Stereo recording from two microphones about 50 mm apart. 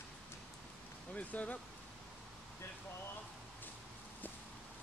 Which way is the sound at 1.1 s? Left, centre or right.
Left.